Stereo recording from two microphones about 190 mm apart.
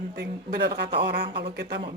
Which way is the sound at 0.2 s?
60° right (ahead or behind).